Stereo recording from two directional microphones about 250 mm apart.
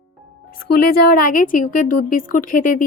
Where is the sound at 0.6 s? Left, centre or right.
Left.